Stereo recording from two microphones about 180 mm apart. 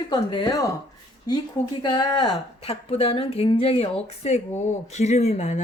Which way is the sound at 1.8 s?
25° left (ahead or behind).